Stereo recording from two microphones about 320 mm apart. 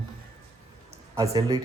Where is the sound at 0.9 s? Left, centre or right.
Centre.